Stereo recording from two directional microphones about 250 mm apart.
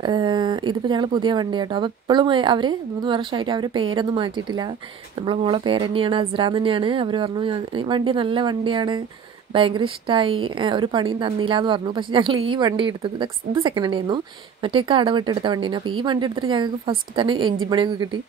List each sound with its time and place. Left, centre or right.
0.0 s a woman's voice: centre